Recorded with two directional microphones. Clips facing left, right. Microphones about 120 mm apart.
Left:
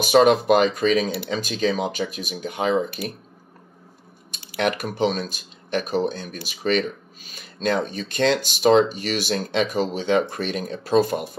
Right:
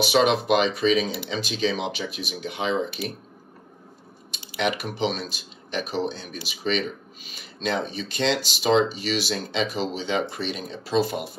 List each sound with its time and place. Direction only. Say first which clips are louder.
0.0 s speech: left 5 dB; 45° left (ahead or behind)
4.6 s speech: left 3 dB; 50° left (ahead or behind)